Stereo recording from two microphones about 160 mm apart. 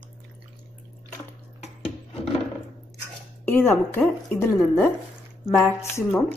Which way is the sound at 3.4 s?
15° left (ahead or behind).